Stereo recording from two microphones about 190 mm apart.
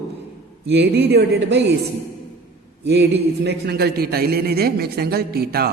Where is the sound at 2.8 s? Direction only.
65° right (ahead or behind).